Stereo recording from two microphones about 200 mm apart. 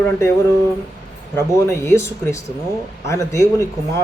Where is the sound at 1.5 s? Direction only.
15° left (ahead or behind).